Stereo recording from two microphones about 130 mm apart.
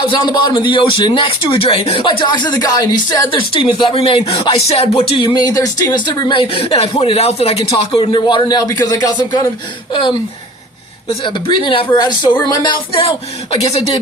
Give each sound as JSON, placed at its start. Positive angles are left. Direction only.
{"t": 0.1, "sound": "speech", "side_deg": 35}
{"t": 3.2, "sound": "speech", "side_deg": 40}
{"t": 11.2, "sound": "speech", "side_deg": 40}